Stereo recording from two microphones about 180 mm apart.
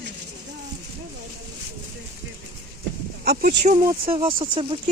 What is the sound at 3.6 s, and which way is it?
Speech, 45° right (ahead or behind).